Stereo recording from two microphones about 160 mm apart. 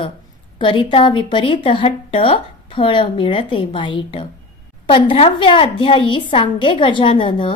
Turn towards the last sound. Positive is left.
turn(degrees=30)  # may be behind; listen again after turning